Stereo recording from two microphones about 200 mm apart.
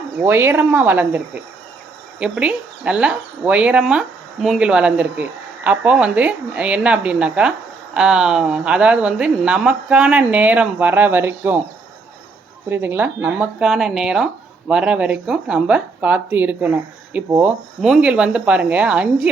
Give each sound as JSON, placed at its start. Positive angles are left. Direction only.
{"t": 0.2, "sound": "speech", "side_deg": -10}
{"t": 12.6, "sound": "speech", "side_deg": -10}